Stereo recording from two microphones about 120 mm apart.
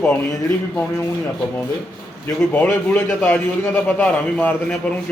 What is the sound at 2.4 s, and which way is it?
A man's voice, 15° left (ahead or behind).